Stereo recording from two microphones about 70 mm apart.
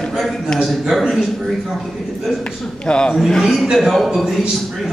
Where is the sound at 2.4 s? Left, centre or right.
Centre.